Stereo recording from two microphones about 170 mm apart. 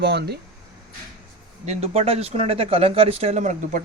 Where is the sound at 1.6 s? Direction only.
40° right (ahead or behind).